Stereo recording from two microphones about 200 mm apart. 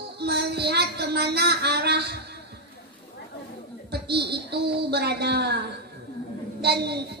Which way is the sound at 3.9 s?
55° right (ahead or behind).